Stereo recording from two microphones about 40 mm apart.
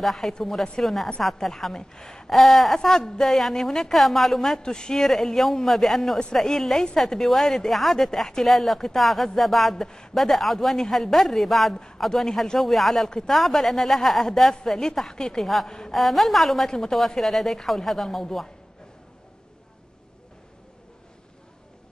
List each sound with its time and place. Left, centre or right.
0.0 s speech: centre
2.3 s speech: centre
4.6 s speech: centre
4.9 s speech: centre
16.6 s speech: centre